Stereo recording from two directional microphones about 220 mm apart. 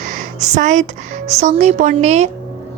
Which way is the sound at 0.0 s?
35° right (ahead or behind).